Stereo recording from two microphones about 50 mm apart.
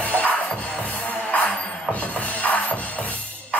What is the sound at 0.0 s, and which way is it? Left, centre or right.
Music, left.